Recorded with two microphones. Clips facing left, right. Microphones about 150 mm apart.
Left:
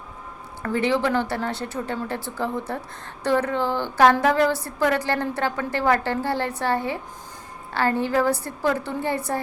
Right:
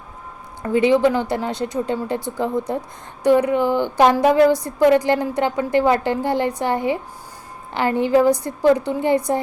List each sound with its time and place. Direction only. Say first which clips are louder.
0.6 s a woman's voice: right 7 dB; 15° right (ahead or behind)